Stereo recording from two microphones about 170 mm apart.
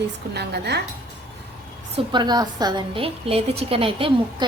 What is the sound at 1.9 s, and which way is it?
A woman's voice, 25° right (ahead or behind).